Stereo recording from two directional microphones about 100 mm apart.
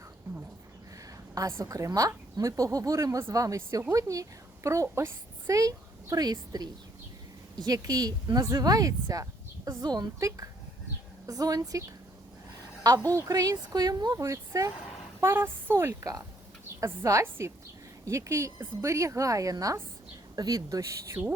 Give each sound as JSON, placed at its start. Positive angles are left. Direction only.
{"t": 1.4, "sound": "a woman's voice", "side_deg": -30}